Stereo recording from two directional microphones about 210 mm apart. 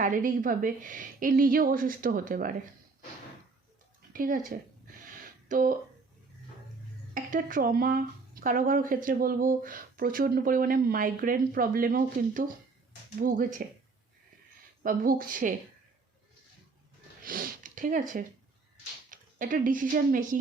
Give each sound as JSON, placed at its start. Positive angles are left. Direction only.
{"t": 0.0, "sound": "speech", "side_deg": -40}
{"t": 4.1, "sound": "speech", "side_deg": -40}
{"t": 5.5, "sound": "speech", "side_deg": -40}
{"t": 7.1, "sound": "speech", "side_deg": -40}
{"t": 14.8, "sound": "speech", "side_deg": -40}
{"t": 17.2, "sound": "sniff", "side_deg": -45}
{"t": 19.1, "sound": "speech", "side_deg": -40}